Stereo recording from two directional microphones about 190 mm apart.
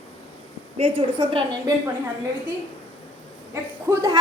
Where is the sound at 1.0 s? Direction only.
25° right (ahead or behind).